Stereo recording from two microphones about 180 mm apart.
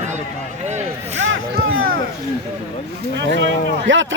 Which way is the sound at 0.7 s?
40° right (ahead or behind).